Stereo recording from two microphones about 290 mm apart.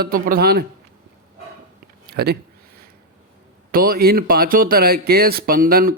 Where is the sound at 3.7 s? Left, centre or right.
Right.